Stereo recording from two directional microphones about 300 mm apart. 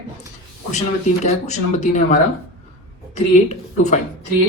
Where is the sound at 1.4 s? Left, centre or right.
Left.